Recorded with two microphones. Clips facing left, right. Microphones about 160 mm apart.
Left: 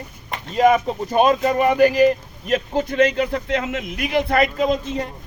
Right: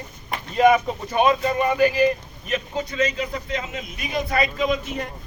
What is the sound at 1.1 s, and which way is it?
Speech, 45° left (ahead or behind).